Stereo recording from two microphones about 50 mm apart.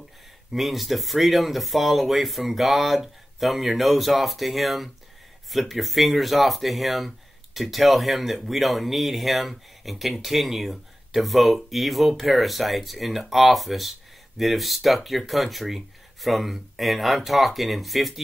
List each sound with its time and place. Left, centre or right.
0.5 s speech: centre